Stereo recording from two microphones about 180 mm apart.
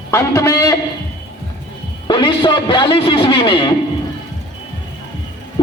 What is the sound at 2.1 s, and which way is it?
Speech, 25° left (ahead or behind).